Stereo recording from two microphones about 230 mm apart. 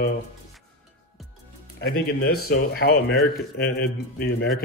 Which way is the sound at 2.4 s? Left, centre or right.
Left.